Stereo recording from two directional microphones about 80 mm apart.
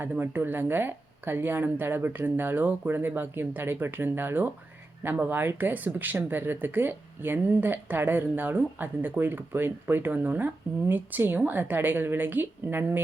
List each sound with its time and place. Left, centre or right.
0.0 s speech: right